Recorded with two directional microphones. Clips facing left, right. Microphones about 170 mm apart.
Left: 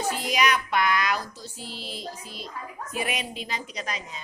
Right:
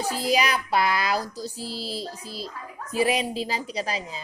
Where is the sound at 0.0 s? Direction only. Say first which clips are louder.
Right 2 dB; 35° right (ahead or behind).